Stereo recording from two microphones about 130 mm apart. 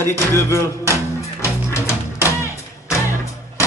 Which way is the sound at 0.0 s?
20° left (ahead or behind).